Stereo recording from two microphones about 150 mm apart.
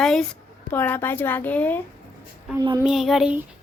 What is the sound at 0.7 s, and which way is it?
Speech, 15° left (ahead or behind).